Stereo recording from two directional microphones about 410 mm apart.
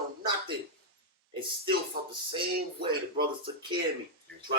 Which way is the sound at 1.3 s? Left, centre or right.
Centre.